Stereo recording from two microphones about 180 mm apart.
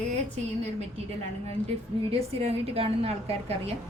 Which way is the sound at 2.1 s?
35° right (ahead or behind).